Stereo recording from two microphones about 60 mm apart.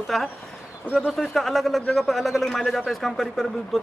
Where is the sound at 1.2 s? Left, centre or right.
Centre.